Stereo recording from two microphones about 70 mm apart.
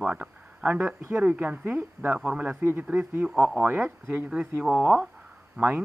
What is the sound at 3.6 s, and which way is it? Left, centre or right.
Speech, right.